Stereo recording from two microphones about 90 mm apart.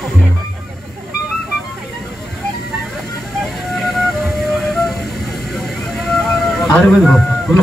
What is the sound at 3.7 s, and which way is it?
Flute, centre (ahead or behind).